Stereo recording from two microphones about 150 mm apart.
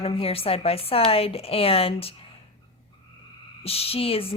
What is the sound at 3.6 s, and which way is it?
Speech, 40° left (ahead or behind).